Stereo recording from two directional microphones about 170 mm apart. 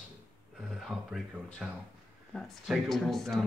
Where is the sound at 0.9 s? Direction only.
Centre (ahead or behind).